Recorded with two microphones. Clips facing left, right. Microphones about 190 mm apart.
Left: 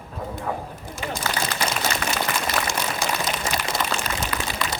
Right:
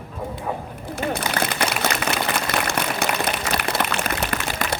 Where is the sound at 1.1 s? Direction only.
65° right (ahead or behind).